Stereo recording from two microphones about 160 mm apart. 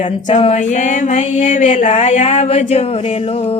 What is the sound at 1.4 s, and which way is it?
Speech, 45° left (ahead or behind).